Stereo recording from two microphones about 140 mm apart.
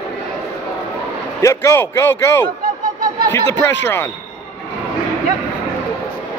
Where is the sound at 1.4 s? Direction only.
20° left (ahead or behind).